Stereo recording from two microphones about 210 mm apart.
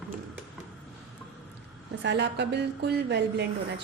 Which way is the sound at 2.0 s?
55° right (ahead or behind).